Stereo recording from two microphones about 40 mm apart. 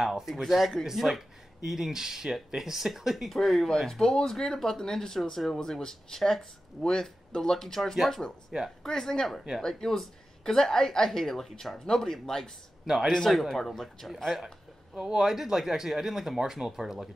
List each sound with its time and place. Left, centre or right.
0.0 s speech: centre
8.5 s speech: centre
8.8 s speech: centre
13.3 s speech: centre
15.0 s speech: centre